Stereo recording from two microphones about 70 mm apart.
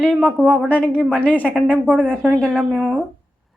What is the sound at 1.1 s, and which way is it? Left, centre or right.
Speech, centre.